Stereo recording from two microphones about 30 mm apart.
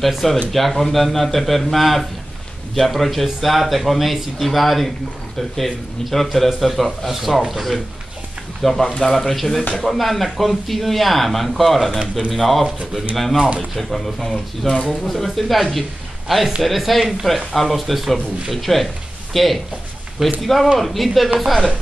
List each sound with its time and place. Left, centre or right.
0.0 s speech: centre
6.0 s speech: centre
8.6 s speech: centre